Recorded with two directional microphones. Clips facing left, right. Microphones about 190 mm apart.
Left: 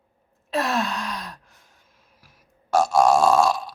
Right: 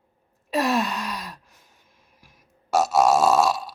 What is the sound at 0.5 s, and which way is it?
Sigh, 10° right (ahead or behind).